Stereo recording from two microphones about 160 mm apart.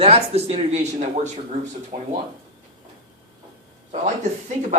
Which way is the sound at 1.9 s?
65° right (ahead or behind).